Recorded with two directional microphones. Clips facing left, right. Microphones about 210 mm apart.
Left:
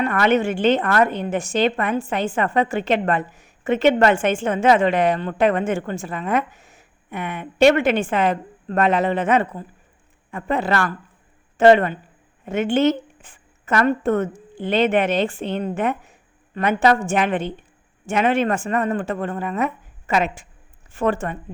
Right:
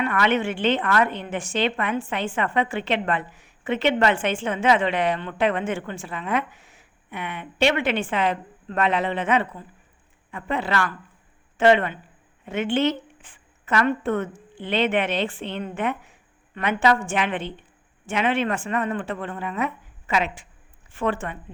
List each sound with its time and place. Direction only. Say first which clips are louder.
0.0 s a woman's voice: left 4 dB; 45° left (ahead or behind)